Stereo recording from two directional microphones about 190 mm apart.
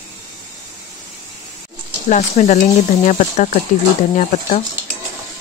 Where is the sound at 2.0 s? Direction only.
40° left (ahead or behind).